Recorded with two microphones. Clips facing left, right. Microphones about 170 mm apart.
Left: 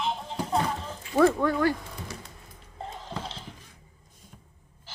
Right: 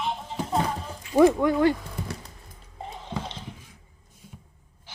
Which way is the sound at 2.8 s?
10° right (ahead or behind).